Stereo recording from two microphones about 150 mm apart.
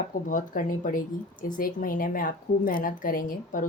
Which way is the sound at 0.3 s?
65° left (ahead or behind).